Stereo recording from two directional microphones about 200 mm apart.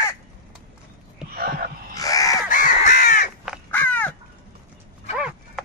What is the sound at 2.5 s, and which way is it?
Crow, 40° left (ahead or behind).